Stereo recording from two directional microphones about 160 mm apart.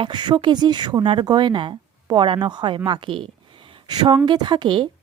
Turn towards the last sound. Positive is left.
turn(degrees=-30)  # may be behind; listen again after turning